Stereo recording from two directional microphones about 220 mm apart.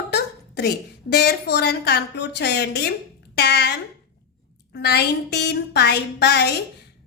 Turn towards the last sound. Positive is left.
turn(degrees=50)  # may be behind; listen again after turning